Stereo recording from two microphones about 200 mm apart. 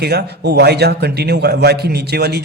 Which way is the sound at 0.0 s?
55° right (ahead or behind).